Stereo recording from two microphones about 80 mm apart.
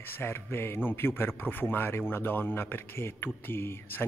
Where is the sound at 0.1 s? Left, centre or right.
Left.